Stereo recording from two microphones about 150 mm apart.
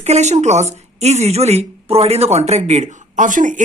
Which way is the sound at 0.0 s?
50° right (ahead or behind).